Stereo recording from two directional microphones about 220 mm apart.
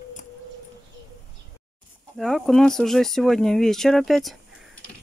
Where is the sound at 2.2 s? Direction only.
Centre (ahead or behind).